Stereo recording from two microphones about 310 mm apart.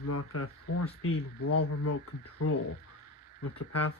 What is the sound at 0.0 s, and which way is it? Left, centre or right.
Speech, left.